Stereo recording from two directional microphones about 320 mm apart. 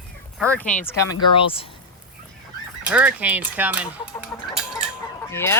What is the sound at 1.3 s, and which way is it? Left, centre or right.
Speech, centre.